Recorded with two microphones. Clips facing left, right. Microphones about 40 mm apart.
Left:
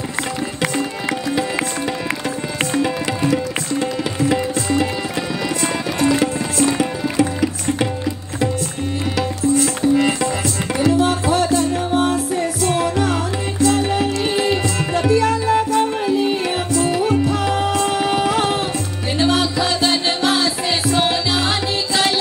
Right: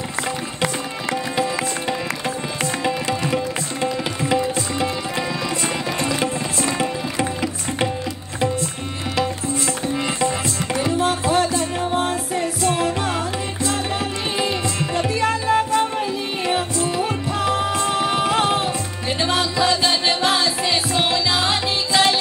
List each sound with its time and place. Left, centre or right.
3.8 s tabla: right
6.8 s music: right
11.3 s music: right
15.4 s music: centre
17.3 s tabla: right
19.5 s music: right